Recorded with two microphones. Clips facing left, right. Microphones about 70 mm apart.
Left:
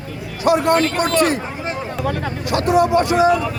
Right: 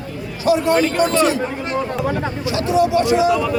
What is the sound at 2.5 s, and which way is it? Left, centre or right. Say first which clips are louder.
Speech: left 2 dB; left.